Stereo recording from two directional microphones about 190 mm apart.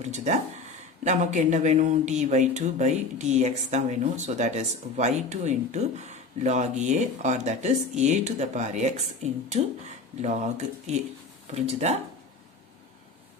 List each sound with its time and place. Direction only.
0.0 s speech: 40° right (ahead or behind)